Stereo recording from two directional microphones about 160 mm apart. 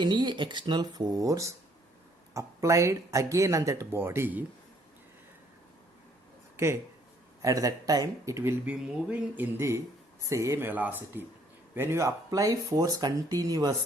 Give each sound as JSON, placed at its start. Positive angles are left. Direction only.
{"t": 0.0, "sound": "speech", "side_deg": -30}
{"t": 7.4, "sound": "speech", "side_deg": -20}